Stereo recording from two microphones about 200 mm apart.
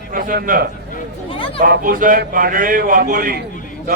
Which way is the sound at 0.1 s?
45° right (ahead or behind).